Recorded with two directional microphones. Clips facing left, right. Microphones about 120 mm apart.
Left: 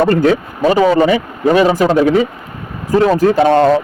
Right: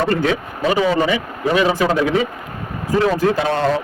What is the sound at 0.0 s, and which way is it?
A man's voice, 40° left (ahead or behind).